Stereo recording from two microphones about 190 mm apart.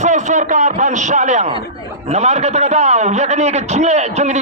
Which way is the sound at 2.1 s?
35° right (ahead or behind).